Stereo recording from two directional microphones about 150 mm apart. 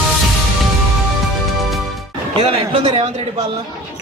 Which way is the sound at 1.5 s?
Centre (ahead or behind).